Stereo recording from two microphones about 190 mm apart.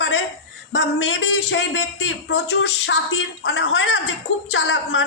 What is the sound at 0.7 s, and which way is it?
A woman's voice, 75° left (ahead or behind).